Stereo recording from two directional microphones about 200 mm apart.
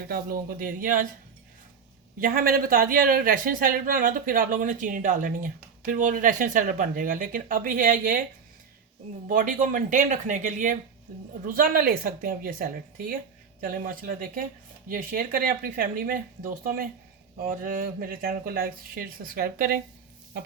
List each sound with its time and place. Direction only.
0.1 s speech: 45° right (ahead or behind)
2.2 s speech: 45° right (ahead or behind)
9.2 s speech: 40° right (ahead or behind)